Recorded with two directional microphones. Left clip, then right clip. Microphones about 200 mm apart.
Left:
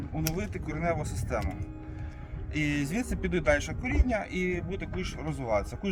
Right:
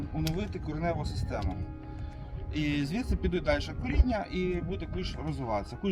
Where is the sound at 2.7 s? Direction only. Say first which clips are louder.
Left 1 dB; 40° left (ahead or behind).